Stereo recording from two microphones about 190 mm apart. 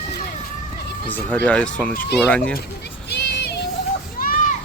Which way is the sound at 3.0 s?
60° left (ahead or behind).